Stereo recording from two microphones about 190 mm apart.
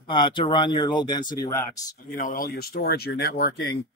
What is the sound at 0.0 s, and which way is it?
Speech, 25° left (ahead or behind).